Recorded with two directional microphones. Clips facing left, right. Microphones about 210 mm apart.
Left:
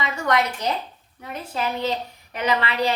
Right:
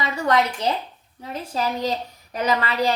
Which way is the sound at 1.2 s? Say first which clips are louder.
Right 2 dB; 35° right (ahead or behind).